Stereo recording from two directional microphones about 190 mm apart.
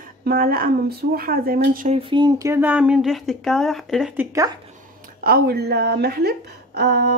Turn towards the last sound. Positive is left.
turn(degrees=-60)  # may be behind; listen again after turning